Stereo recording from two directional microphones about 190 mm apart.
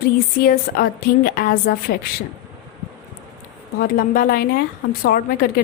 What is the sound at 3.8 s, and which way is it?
Speech, 50° left (ahead or behind).